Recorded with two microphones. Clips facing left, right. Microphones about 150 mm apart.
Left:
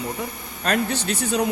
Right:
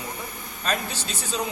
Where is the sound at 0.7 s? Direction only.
65° left (ahead or behind).